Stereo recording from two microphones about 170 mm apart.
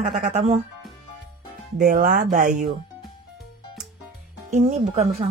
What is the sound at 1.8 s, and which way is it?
Speech, 55° right (ahead or behind).